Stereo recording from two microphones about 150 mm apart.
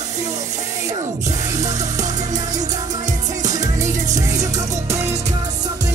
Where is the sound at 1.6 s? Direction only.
50° right (ahead or behind).